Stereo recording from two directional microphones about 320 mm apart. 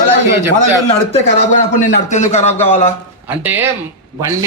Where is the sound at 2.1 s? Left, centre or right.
Left.